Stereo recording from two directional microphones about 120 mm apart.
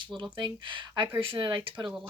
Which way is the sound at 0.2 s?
45° right (ahead or behind).